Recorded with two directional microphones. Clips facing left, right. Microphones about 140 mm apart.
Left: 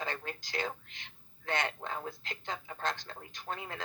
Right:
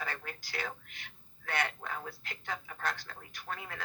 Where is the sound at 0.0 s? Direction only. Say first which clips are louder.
Left 2 dB; 25° left (ahead or behind).